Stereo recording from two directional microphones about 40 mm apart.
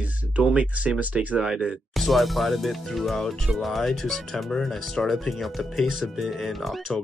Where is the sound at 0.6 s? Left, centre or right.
Right.